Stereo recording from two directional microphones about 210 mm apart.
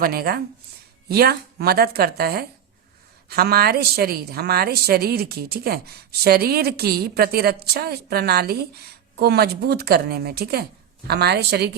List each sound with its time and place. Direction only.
0.0 s a woman's voice: 45° right (ahead or behind)